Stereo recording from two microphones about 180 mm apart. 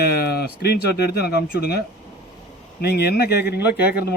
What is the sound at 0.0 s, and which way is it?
Speech, 60° left (ahead or behind).